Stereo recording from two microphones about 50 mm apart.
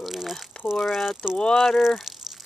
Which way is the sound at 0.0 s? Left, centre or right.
Centre.